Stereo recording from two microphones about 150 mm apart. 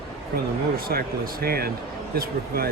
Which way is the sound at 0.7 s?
80° right.